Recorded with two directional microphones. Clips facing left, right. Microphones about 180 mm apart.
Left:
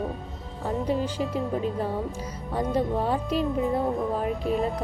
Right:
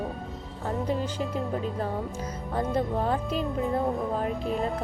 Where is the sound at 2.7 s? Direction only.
10° left (ahead or behind).